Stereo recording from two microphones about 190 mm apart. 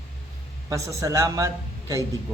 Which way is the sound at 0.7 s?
15° right (ahead or behind).